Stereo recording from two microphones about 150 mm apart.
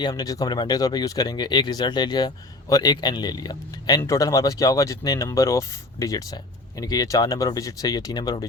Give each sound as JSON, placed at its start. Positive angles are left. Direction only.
{"t": 0.0, "sound": "speech", "side_deg": 25}